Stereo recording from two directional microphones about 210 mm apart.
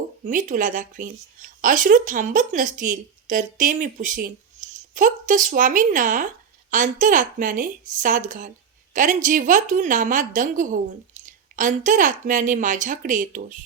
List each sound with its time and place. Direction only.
0.3 s speech: 40° right (ahead or behind)